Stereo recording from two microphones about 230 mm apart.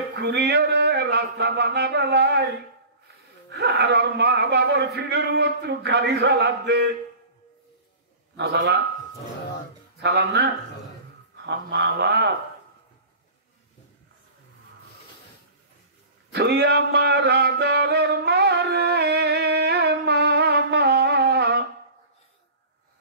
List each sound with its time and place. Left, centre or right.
0.1 s a man's voice: right
3.5 s a man's voice: right
8.4 s a man's voice: right
10.0 s a man's voice: right
16.3 s music: right